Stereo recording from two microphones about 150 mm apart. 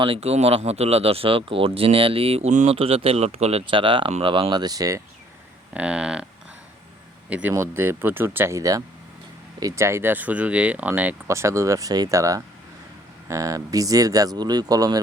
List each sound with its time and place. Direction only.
0.0 s speech: 40° right (ahead or behind); by 5.0 s 20° right (ahead or behind)
5.7 s speech: 5° right (ahead or behind)
7.3 s speech: 10° right (ahead or behind); by 15.0 s 25° right (ahead or behind)